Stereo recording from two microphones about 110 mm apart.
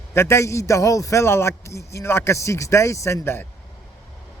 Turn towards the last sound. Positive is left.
turn(degrees=20)  # may be behind; listen again after turning